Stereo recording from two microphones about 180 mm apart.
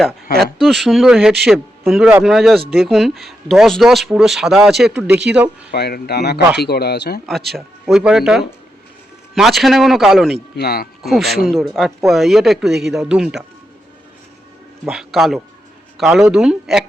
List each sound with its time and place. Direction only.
0.3 s speech: centre (ahead or behind)
5.7 s speech: 65° left (ahead or behind)
7.5 s speech: centre (ahead or behind)
10.5 s speech: 60° left (ahead or behind)
11.0 s speech: centre (ahead or behind)
14.8 s speech: centre (ahead or behind)